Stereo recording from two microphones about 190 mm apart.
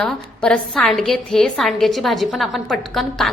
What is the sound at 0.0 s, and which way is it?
A woman's voice, 5° left (ahead or behind).